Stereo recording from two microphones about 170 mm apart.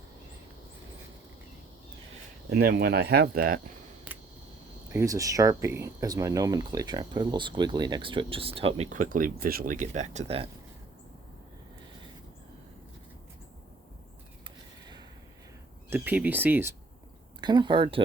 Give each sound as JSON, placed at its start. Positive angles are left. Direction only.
{"t": 2.5, "sound": "speech", "side_deg": -65}
{"t": 4.9, "sound": "speech", "side_deg": -15}
{"t": 8.9, "sound": "speech", "side_deg": -50}
{"t": 14.4, "sound": "a sound", "side_deg": -25}
{"t": 15.9, "sound": "speech", "side_deg": -10}
{"t": 17.4, "sound": "speech", "side_deg": -25}